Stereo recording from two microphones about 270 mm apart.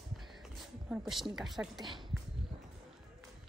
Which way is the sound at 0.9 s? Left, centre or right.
Centre.